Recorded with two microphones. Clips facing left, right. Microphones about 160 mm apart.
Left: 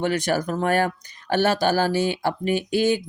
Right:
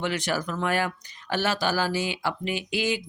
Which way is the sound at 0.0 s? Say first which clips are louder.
Left 5 dB; 50° left (ahead or behind).